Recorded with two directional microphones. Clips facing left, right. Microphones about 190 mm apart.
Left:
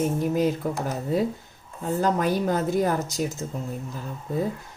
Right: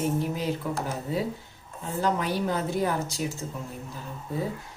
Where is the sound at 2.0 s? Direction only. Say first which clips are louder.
Left 3 dB; 45° left (ahead or behind).